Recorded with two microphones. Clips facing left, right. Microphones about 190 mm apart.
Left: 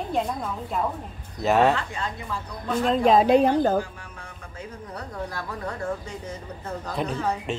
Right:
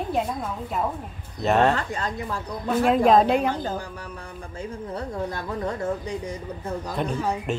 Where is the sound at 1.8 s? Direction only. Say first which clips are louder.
Right 2 dB; 40° right (ahead or behind).